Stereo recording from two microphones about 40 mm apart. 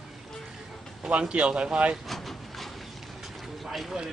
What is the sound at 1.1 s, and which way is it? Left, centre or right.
Speech, right.